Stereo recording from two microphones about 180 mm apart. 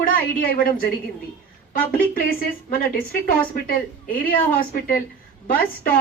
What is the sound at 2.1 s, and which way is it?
A woman's voice, 55° left (ahead or behind).